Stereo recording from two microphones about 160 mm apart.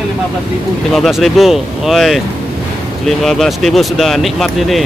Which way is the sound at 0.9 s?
Centre (ahead or behind).